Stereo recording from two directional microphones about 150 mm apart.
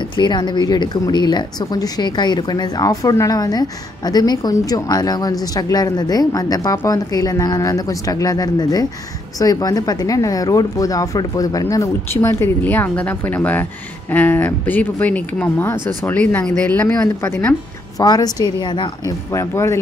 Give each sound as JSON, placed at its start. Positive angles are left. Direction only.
{"t": 0.1, "sound": "a woman's voice", "side_deg": 30}
{"t": 17.9, "sound": "a woman's voice", "side_deg": 25}